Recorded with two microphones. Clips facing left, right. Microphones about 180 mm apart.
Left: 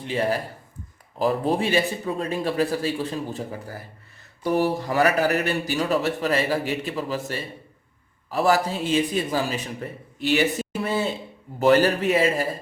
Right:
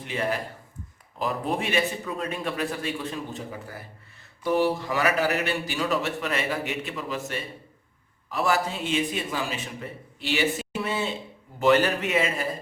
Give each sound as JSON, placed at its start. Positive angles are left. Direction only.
{"t": 0.0, "sound": "a man's voice", "side_deg": 30}
{"t": 10.2, "sound": "a sound", "side_deg": 45}
{"t": 11.6, "sound": "a man's voice", "side_deg": 35}